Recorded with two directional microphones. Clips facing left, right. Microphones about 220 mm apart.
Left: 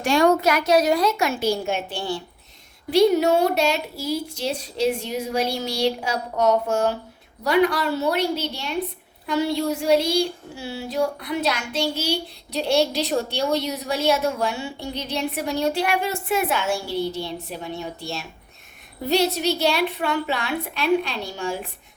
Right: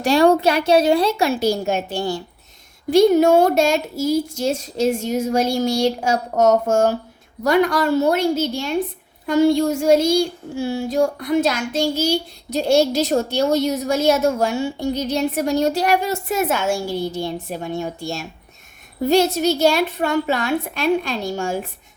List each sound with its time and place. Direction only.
0.0 s a woman's voice: 35° right (ahead or behind)